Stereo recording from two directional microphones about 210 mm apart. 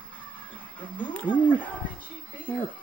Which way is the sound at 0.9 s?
10° left (ahead or behind).